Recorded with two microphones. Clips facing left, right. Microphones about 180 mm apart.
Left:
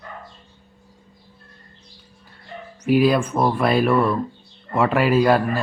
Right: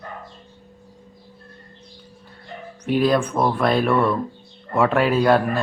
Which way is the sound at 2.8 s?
5° left (ahead or behind).